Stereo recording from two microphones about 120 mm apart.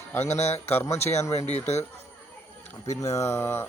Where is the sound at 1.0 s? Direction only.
70° left (ahead or behind).